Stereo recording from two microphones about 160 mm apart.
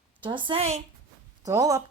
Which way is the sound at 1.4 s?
20° right (ahead or behind).